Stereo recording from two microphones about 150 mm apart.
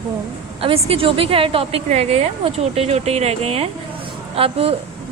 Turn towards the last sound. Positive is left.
turn(degrees=-40)  # may be behind; listen again after turning